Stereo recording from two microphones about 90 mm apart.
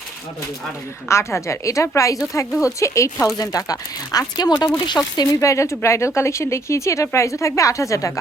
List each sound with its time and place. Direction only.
1.0 s speech: 30° left (ahead or behind)